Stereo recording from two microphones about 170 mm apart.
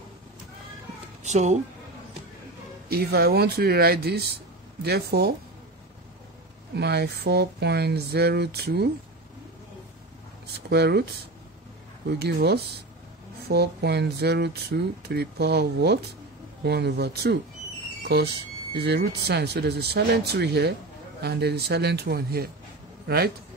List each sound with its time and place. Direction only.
1.2 s speech: 45° right (ahead or behind)
2.9 s speech: 65° right (ahead or behind)
6.7 s speech: 75° right (ahead or behind)
10.4 s speech: 70° right (ahead or behind)
12.1 s speech: 70° right (ahead or behind)